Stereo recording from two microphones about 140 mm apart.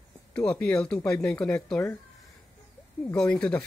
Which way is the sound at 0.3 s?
10° left (ahead or behind).